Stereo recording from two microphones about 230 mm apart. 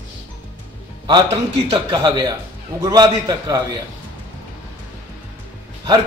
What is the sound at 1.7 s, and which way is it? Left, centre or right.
A man's voice, centre.